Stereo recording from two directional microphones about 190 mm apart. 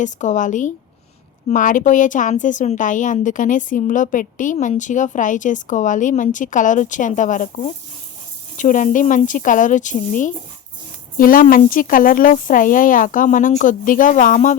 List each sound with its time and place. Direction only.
0.0 s a woman's voice: 40° left (ahead or behind)